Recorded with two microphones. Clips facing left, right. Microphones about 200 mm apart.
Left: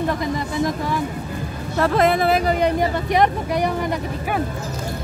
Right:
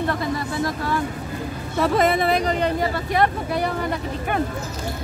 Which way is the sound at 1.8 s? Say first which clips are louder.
Left 2 dB; centre (ahead or behind).